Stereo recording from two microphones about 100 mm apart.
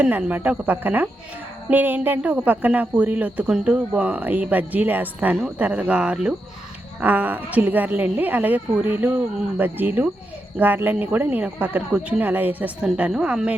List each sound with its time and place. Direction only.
0.0 s a woman's voice: 15° right (ahead or behind)